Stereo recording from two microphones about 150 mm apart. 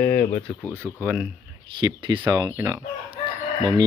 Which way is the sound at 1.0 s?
10° right (ahead or behind).